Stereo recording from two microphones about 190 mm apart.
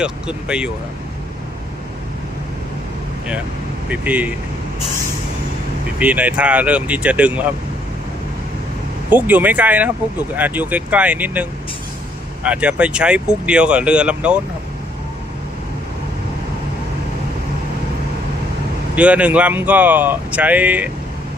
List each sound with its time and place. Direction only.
0.0 s speech: 5° right (ahead or behind)
3.8 s speech: 5° right (ahead or behind)
6.0 s speech: 5° right (ahead or behind)
9.0 s speech: 10° right (ahead or behind)
18.9 s speech: 5° right (ahead or behind)